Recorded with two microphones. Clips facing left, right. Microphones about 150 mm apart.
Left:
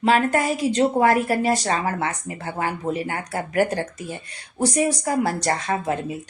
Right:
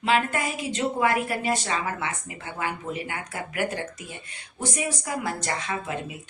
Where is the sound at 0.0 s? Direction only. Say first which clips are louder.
Left 5 dB; 45° left (ahead or behind).